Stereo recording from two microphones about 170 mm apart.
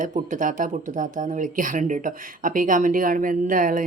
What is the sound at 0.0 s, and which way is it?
Speech, 50° right (ahead or behind).